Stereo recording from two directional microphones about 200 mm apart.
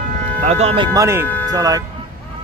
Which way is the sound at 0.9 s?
15° right (ahead or behind).